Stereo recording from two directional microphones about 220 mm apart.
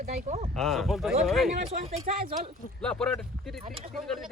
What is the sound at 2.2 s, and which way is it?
Speech, 25° right (ahead or behind).